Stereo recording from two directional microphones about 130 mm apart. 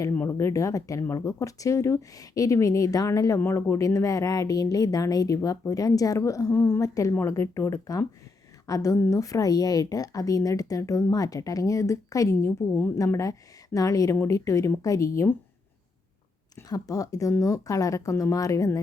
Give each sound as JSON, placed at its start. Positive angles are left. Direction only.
{"t": 0.3, "sound": "speech", "side_deg": 25}
{"t": 16.6, "sound": "speech", "side_deg": 30}